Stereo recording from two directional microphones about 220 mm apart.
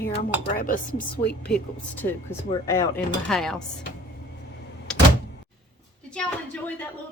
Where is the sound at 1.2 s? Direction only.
50° left (ahead or behind).